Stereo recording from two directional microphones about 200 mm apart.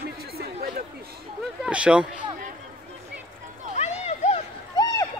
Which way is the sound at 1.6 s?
5° right (ahead or behind).